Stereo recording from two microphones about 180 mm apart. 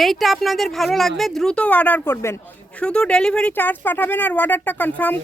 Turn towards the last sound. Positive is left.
turn(degrees=10)  # may be behind; listen again after turning